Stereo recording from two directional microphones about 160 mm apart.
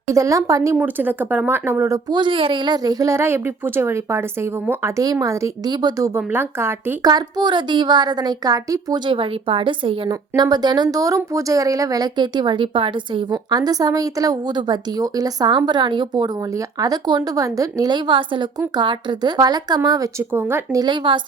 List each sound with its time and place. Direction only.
0.1 s a woman's voice: 20° right (ahead or behind)
20.8 s speech: 30° right (ahead or behind)